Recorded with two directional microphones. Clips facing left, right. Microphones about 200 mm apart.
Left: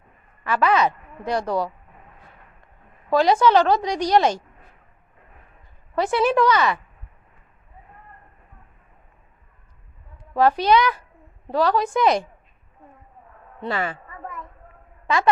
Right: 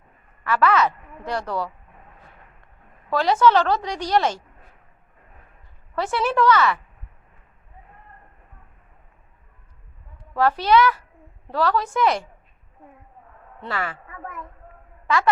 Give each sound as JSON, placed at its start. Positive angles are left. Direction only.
{"t": 0.4, "sound": "a woman's voice", "side_deg": 15}
{"t": 3.1, "sound": "a woman's voice", "side_deg": 15}
{"t": 5.9, "sound": "a woman's voice", "side_deg": 15}
{"t": 10.3, "sound": "a woman's voice", "side_deg": 15}
{"t": 13.6, "sound": "a woman's voice", "side_deg": 20}
{"t": 15.0, "sound": "speech", "side_deg": 20}